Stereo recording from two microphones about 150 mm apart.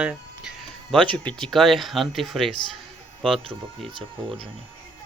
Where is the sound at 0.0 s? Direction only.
5° right (ahead or behind).